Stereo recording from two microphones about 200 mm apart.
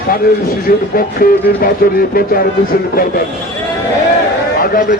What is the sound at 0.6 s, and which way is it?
A man's voice, 45° left (ahead or behind).